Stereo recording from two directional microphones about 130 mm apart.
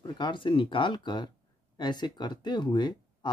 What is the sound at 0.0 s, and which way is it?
Speech, 35° left (ahead or behind).